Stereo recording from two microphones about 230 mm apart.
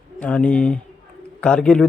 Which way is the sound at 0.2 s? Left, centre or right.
Centre.